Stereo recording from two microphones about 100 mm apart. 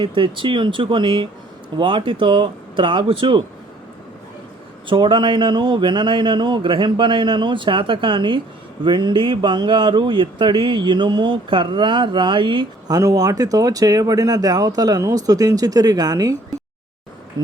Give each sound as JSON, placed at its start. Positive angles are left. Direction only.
{"t": 0.0, "sound": "speech", "side_deg": -55}
{"t": 4.9, "sound": "speech", "side_deg": -55}
{"t": 12.9, "sound": "speech", "side_deg": -40}